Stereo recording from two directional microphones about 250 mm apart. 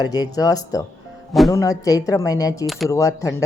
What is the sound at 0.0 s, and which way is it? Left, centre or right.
Speech, centre.